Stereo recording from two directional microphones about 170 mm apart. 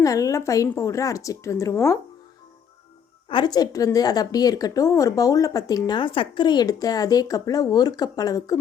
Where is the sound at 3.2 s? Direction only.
25° left (ahead or behind).